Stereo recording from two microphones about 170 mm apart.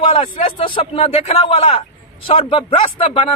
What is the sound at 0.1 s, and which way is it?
Speech, 30° left (ahead or behind).